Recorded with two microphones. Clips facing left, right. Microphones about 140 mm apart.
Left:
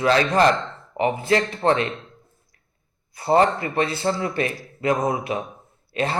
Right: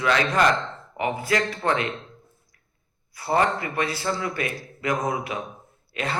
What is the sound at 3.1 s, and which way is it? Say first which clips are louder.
A man's voice: left 4 dB; 30° left (ahead or behind).